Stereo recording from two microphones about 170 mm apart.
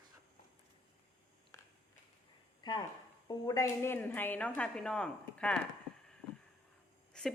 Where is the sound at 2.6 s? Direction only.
25° left (ahead or behind); by 5.6 s 5° left (ahead or behind).